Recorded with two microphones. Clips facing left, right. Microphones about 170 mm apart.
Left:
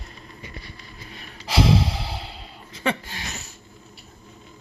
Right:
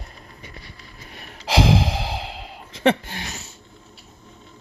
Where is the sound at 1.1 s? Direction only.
80° right.